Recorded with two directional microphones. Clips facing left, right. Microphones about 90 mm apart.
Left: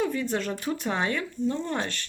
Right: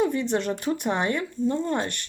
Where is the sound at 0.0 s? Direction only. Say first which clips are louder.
Right 4 dB; 20° right (ahead or behind).